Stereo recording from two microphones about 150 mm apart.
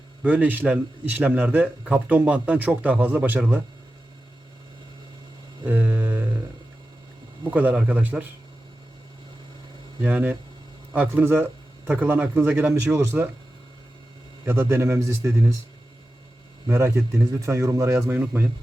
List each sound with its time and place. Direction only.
0.2 s a man's voice: 10° right (ahead or behind)
5.6 s a sound: 10° right (ahead or behind)
7.5 s a man's voice: 10° right (ahead or behind)
10.0 s a man's voice: 10° right (ahead or behind)
14.4 s a man's voice: 15° right (ahead or behind)
16.6 s a man's voice: 15° right (ahead or behind)